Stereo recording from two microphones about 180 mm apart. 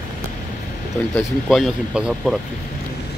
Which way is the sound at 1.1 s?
Centre (ahead or behind).